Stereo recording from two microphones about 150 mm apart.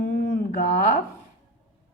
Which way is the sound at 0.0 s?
75° left (ahead or behind).